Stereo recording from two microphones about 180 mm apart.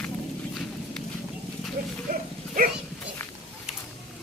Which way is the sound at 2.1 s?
45° right (ahead or behind).